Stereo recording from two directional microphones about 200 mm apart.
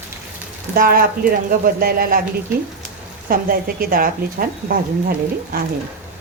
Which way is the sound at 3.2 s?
45° right (ahead or behind).